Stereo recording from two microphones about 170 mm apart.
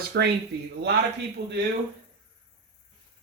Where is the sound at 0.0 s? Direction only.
70° right (ahead or behind).